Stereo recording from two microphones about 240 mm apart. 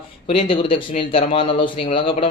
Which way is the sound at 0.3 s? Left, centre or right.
Left.